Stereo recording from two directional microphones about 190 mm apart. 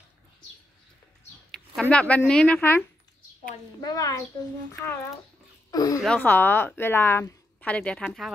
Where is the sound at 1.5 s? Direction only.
5° left (ahead or behind).